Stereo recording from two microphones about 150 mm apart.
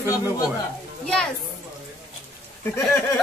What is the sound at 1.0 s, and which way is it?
Speech, 5° left (ahead or behind).